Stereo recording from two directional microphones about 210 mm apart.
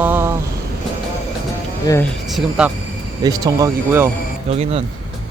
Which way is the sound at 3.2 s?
20° right (ahead or behind).